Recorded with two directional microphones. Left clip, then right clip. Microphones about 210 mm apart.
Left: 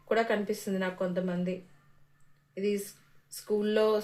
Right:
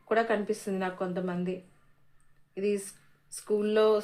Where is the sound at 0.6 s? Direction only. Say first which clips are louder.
Even; 30° right (ahead or behind).